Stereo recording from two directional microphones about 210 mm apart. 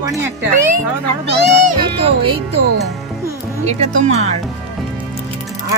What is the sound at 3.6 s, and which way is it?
Speech, 30° right (ahead or behind).